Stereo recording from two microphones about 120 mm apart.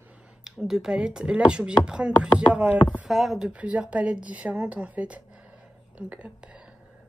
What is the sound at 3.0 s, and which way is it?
A woman's voice, 5° right (ahead or behind).